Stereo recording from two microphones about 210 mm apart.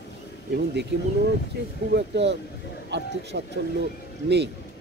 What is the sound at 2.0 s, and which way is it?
Speech, 55° right (ahead or behind).